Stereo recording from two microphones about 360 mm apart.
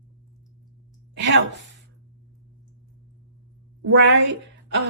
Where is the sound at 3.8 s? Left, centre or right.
Right.